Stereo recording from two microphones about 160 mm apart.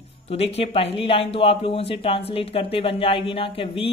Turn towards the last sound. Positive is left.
turn(degrees=35)  # may be behind; listen again after turning